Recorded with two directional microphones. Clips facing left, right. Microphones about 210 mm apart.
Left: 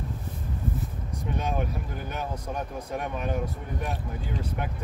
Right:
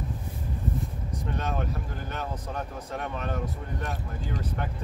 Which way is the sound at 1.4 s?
10° left (ahead or behind).